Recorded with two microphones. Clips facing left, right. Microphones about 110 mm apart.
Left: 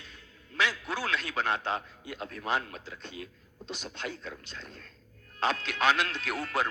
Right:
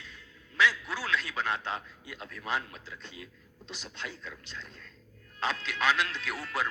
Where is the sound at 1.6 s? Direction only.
55° left (ahead or behind).